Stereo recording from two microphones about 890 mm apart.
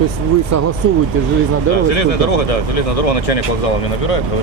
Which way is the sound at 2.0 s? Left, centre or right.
Left.